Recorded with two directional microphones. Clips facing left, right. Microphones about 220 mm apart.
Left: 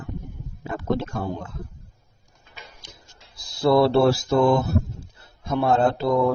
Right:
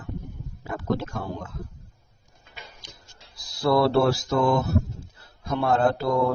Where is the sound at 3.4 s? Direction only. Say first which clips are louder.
Left 3 dB; 25° left (ahead or behind).